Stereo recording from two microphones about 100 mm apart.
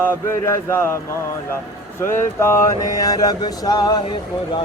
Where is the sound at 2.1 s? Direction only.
25° left (ahead or behind); by 4.6 s 50° left (ahead or behind).